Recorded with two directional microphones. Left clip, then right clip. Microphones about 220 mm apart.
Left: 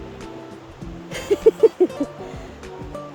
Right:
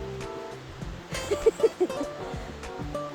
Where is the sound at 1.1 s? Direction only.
35° left (ahead or behind).